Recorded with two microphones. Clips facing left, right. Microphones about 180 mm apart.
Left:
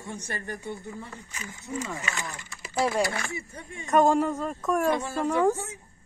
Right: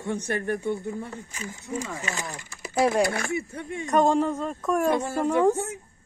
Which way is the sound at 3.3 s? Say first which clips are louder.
Right 8 dB; 60° right (ahead or behind).